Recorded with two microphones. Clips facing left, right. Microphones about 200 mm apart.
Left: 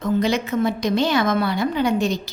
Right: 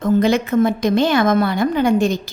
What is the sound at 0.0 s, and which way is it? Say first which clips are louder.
A woman's voice: right 5 dB; 50° right (ahead or behind).